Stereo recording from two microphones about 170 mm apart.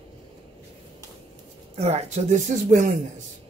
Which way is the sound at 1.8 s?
40° right (ahead or behind).